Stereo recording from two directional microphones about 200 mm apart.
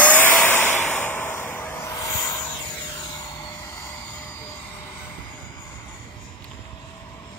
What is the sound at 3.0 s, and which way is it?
Aircraft, 20° left (ahead or behind).